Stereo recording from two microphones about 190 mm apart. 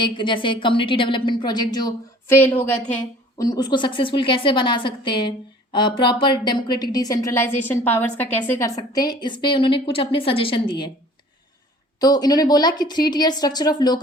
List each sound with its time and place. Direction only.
0.0 s a woman's voice: 25° left (ahead or behind)
2.3 s a woman's voice: 10° left (ahead or behind)
11.9 s a woman's voice: 20° left (ahead or behind)